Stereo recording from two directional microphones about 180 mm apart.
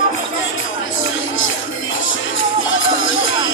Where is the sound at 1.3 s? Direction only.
90° left.